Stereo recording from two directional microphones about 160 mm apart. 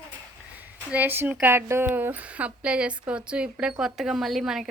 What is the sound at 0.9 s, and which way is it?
A woman's voice, 10° right (ahead or behind).